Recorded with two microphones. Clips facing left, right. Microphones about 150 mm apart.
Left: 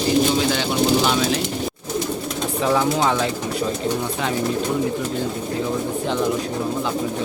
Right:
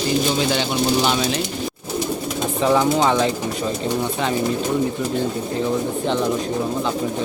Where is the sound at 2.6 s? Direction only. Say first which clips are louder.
Right 2 dB; 5° right (ahead or behind).